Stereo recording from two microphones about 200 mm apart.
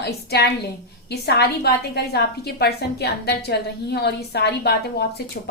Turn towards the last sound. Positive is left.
turn(degrees=55)  # may be behind; listen again after turning